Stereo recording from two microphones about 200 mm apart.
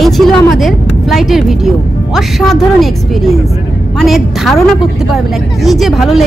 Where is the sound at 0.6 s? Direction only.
Centre (ahead or behind).